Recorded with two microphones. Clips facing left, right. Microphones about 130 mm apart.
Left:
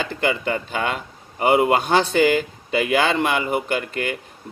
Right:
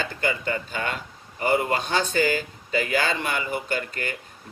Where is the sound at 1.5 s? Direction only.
60° left (ahead or behind).